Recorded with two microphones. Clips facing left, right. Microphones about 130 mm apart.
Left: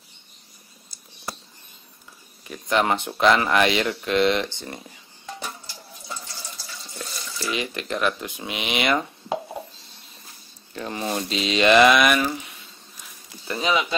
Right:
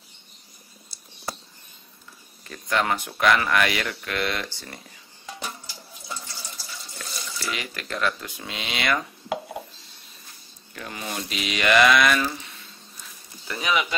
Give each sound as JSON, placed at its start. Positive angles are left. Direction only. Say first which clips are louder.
{"t": 2.4, "sound": "speech", "louder": "left 3 dB", "side_deg": 15}
{"t": 7.3, "sound": "speech", "louder": "left 5 dB", "side_deg": 20}
{"t": 10.7, "sound": "speech", "louder": "left 6 dB", "side_deg": 30}
{"t": 13.5, "sound": "speech", "louder": "left 2 dB", "side_deg": 25}